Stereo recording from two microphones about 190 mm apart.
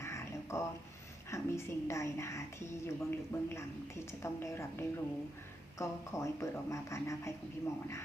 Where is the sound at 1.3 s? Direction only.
15° left (ahead or behind).